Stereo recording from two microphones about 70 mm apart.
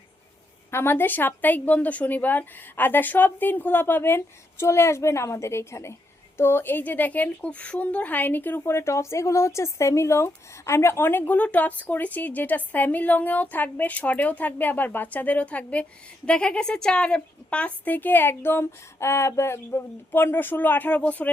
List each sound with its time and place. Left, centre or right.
0.7 s speech: left